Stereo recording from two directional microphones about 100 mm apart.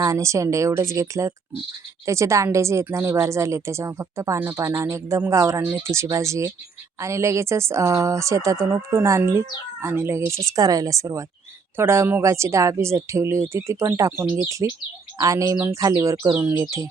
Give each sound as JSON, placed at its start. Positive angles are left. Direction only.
{"t": 0.0, "sound": "a woman's voice", "side_deg": -30}